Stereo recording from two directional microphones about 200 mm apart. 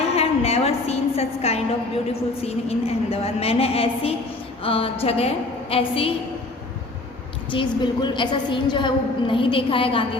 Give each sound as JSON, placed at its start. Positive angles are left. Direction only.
{"t": 0.2, "sound": "a woman's voice", "side_deg": 30}
{"t": 7.5, "sound": "a woman's voice", "side_deg": 25}